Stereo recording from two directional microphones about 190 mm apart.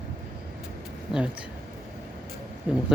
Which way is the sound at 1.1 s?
5° right (ahead or behind).